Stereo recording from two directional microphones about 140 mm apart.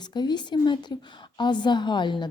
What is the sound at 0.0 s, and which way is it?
A woman's voice, 30° left (ahead or behind).